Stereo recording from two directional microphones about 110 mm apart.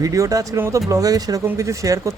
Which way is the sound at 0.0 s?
30° right (ahead or behind).